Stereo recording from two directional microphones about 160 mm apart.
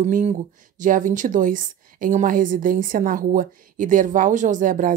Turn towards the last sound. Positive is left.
turn(degrees=-55)  # may be behind; listen again after turning